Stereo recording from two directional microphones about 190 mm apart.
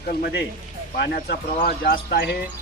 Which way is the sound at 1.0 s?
55° left (ahead or behind).